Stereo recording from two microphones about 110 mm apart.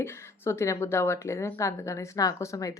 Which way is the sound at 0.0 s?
20° left (ahead or behind).